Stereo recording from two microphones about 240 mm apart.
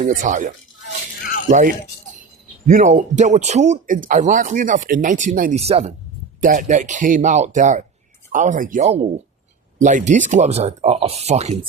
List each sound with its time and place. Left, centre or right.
0.0 s speech: right